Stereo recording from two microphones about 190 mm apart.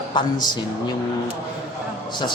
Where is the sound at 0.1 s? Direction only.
25° left (ahead or behind).